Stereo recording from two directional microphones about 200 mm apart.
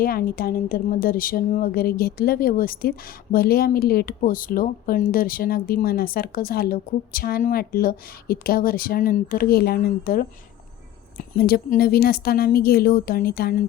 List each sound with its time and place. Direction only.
0.0 s a woman's voice: 50° left (ahead or behind)